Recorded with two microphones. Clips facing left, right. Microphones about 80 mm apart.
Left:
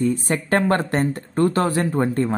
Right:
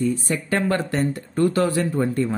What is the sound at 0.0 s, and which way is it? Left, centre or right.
Speech, left.